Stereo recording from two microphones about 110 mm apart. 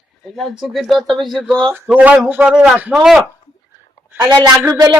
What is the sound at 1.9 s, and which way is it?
A man's voice, 15° right (ahead or behind).